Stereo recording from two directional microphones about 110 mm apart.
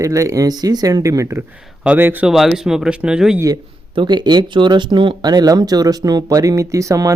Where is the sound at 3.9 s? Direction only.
45° right (ahead or behind).